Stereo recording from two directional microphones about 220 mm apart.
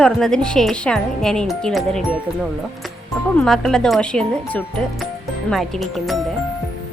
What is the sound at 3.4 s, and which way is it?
Speech, centre (ahead or behind).